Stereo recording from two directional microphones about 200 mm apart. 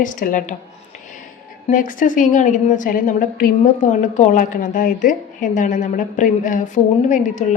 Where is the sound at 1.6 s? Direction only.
40° left (ahead or behind).